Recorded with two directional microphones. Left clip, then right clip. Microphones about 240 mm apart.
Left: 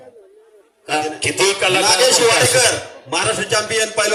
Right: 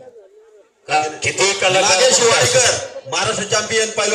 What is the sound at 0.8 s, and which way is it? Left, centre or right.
A man's voice, left.